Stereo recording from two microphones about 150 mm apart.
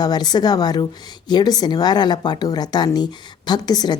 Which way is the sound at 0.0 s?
25° left (ahead or behind).